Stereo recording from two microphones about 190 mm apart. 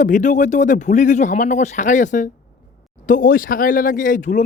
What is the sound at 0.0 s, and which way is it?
Speech, 40° left (ahead or behind).